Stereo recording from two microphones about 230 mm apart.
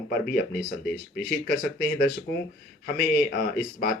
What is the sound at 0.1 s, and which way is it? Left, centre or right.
Speech, left.